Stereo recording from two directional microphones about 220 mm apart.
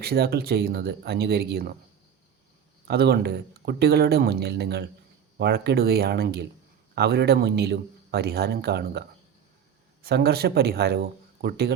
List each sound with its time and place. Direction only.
0.0 s speech: 45° right (ahead or behind)
2.8 s speech: 45° right (ahead or behind)